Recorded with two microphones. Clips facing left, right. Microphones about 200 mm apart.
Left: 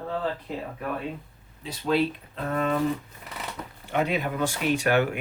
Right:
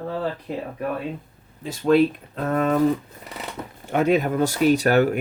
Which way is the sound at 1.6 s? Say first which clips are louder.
Right 7 dB; 50° right (ahead or behind).